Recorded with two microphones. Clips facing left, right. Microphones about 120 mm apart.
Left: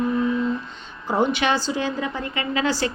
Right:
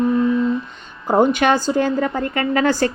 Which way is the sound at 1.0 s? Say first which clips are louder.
Right 6 dB; 45° right (ahead or behind).